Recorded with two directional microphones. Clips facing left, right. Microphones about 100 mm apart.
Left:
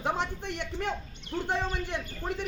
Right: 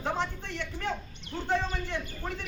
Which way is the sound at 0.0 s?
15° left (ahead or behind).